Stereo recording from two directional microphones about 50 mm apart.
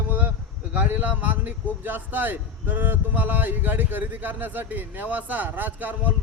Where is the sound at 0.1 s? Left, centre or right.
Right.